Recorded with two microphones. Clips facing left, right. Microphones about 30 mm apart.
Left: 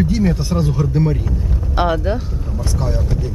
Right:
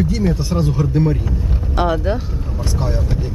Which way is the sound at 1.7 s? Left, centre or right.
Centre.